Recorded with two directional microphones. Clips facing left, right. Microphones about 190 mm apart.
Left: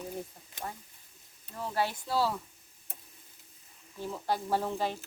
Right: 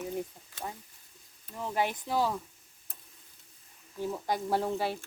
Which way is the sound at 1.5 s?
15° right (ahead or behind).